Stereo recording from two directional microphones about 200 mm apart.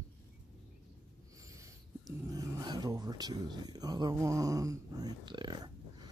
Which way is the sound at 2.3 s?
15° right (ahead or behind).